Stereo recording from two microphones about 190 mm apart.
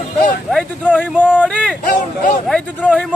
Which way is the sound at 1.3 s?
5° left (ahead or behind).